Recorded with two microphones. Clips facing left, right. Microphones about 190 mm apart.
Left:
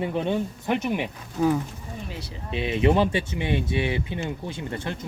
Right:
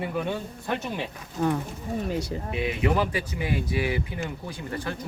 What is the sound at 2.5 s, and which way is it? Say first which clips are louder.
Speech: left 4 dB; 25° left (ahead or behind).